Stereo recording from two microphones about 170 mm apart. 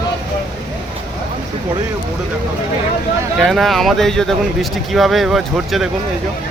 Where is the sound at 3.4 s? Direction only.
Centre (ahead or behind).